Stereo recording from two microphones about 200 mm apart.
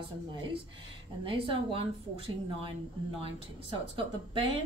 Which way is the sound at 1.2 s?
25° right (ahead or behind).